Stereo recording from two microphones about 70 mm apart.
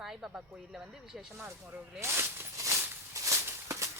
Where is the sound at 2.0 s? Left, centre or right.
Right.